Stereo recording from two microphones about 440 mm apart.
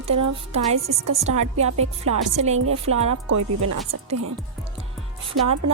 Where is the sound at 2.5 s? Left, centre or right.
Right.